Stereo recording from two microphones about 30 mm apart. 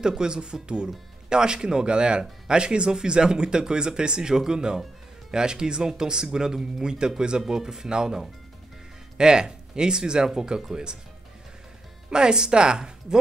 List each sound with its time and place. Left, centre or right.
0.0 s speech: right
12.1 s speech: right